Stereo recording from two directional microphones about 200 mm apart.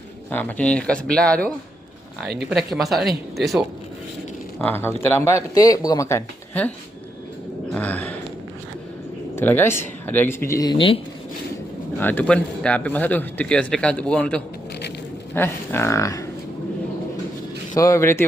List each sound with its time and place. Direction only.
0.3 s speech: 10° left (ahead or behind)
4.6 s speech: 10° left (ahead or behind)
9.3 s speech: 10° left (ahead or behind); by 11.0 s 25° left (ahead or behind)
11.9 s speech: 10° left (ahead or behind)
17.7 s speech: 15° left (ahead or behind)